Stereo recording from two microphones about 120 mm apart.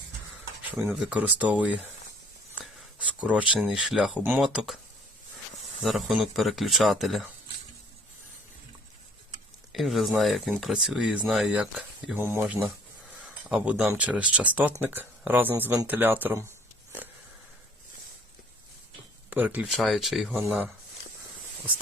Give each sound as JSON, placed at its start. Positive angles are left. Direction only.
{"t": 0.9, "sound": "speech", "side_deg": -10}
{"t": 2.6, "sound": "a sound", "side_deg": -10}
{"t": 3.5, "sound": "speech", "side_deg": -5}
{"t": 5.8, "sound": "speech", "side_deg": 0}
{"t": 9.7, "sound": "speech", "side_deg": 0}
{"t": 12.1, "sound": "speech", "side_deg": -20}
{"t": 12.5, "sound": "speech", "side_deg": -10}
{"t": 19.3, "sound": "speech", "side_deg": -15}
{"t": 19.6, "sound": "speech", "side_deg": 0}